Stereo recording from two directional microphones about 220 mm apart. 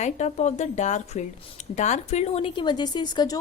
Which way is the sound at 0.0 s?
30° left (ahead or behind).